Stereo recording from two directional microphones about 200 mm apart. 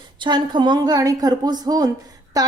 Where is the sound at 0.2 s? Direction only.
20° right (ahead or behind).